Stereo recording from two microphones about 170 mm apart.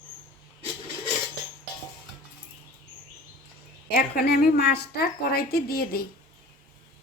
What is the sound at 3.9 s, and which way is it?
A woman's voice, 55° left (ahead or behind).